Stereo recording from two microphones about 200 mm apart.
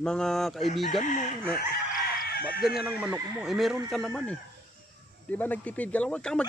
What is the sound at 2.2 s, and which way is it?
Chicken, 50° left (ahead or behind).